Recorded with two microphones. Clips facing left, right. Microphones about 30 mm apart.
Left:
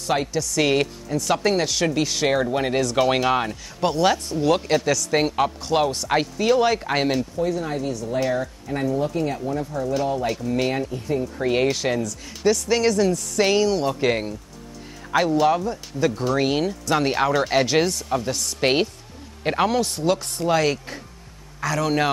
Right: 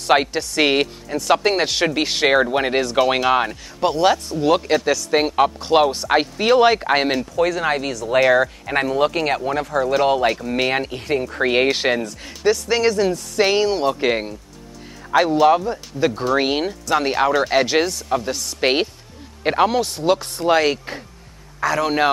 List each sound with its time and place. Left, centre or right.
0.0 s speech: right
3.0 s speech: centre
7.3 s speech: right
9.9 s speech: right
10.4 s speech: right
10.7 s speech: right
11.7 s speech: right
12.4 s speech: centre
16.8 s speech: centre